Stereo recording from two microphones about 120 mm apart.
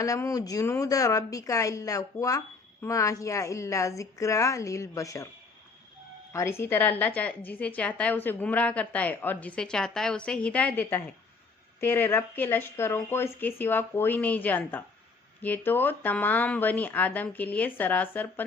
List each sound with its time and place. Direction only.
0.0 s a woman's voice: 25° left (ahead or behind)
6.3 s a woman's voice: 20° left (ahead or behind)